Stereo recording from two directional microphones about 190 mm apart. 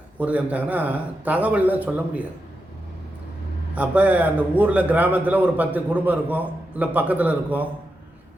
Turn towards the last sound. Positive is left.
turn(degrees=-10)  # may be behind; listen again after turning